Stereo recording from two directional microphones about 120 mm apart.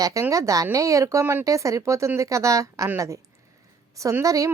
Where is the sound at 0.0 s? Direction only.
25° right (ahead or behind).